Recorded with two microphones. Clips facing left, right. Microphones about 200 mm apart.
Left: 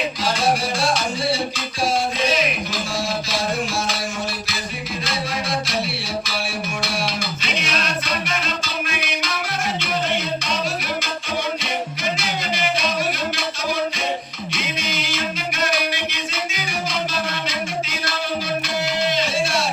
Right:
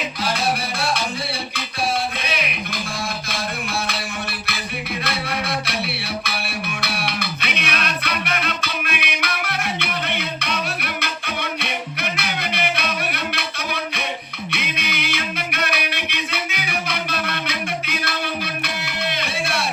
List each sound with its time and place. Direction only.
0.8 s music: 60° right (ahead or behind)
5.0 s music: 60° right (ahead or behind)
6.8 s music: 60° right (ahead or behind)